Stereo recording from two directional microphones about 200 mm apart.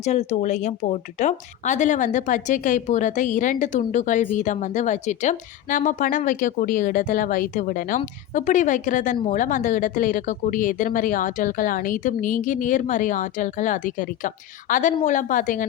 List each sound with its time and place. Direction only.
0.0 s speech: 35° left (ahead or behind)